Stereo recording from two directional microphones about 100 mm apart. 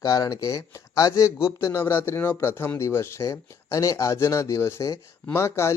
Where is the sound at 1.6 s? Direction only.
25° left (ahead or behind).